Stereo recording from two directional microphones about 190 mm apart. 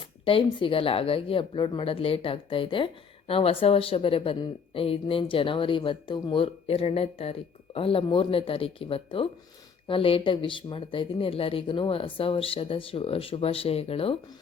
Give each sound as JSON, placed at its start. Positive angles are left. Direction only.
{"t": 0.0, "sound": "speech", "side_deg": 30}